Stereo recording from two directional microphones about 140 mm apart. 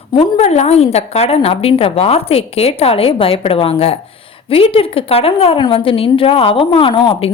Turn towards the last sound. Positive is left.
turn(degrees=40)  # may be behind; listen again after turning